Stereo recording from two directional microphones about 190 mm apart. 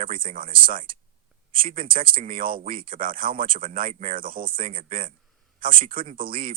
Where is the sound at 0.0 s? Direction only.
45° right (ahead or behind).